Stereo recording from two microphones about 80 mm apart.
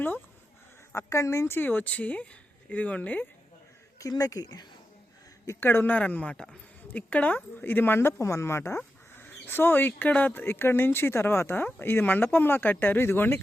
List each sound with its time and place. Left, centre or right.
0.9 s speech: left
1.5 s speech: left
3.9 s speech: left
5.5 s speech: left